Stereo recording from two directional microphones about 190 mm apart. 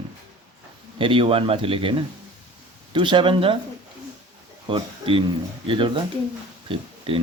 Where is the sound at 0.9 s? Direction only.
30° right (ahead or behind).